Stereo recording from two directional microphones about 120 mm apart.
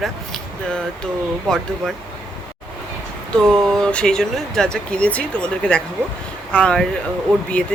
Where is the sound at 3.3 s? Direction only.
5° left (ahead or behind).